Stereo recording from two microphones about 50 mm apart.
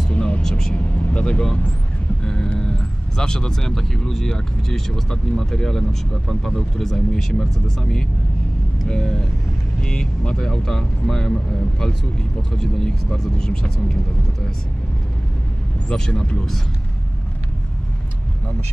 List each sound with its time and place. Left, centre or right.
0.1 s vehicle: left
0.4 s speech: centre
0.7 s speech: left
15.9 s speech: centre
16.3 s speech: centre